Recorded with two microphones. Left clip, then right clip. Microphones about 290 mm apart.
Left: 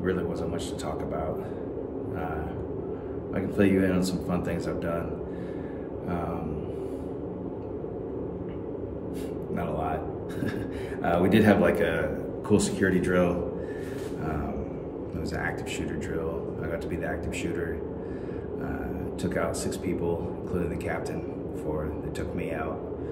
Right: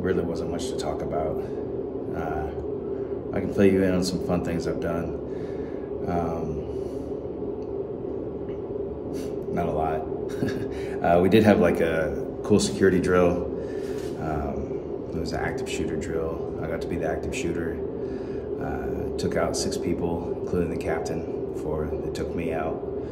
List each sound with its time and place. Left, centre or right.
3.3 s speech: centre
9.6 s speech: centre
11.1 s speech: centre
19.2 s speech: centre